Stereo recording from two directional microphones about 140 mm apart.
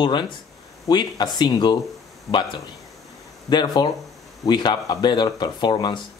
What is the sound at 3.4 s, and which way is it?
Speech, 30° left (ahead or behind).